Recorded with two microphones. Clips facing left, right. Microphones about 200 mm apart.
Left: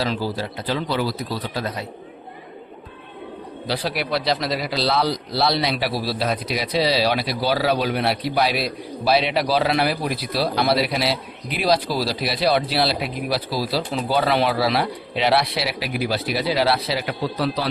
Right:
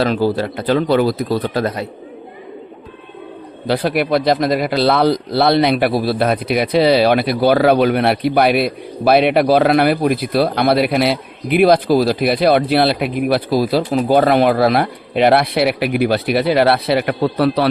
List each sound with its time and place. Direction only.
0.0 s speech: 60° right (ahead or behind)
3.7 s speech: 55° right (ahead or behind)